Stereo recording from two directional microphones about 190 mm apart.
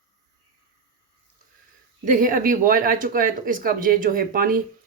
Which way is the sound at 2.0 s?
45° right (ahead or behind).